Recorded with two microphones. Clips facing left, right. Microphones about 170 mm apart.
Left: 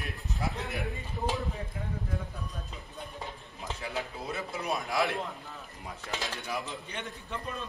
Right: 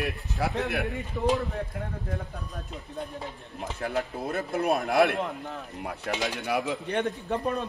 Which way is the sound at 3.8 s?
60° right (ahead or behind).